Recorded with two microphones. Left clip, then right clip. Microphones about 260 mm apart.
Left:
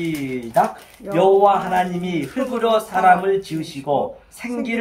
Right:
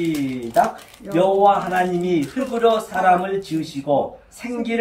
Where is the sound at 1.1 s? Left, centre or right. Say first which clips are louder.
Left 1 dB; centre.